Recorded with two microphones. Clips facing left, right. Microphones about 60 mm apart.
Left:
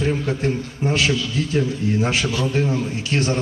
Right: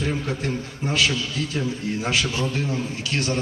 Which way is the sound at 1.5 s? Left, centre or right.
Left.